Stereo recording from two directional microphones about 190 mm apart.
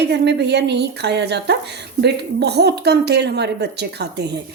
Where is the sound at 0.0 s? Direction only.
65° right (ahead or behind).